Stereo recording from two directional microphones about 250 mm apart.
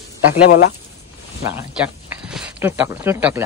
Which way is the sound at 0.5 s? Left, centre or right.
Left.